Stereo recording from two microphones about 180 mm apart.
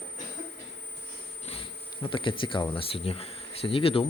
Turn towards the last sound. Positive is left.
turn(degrees=30)  # may be behind; listen again after turning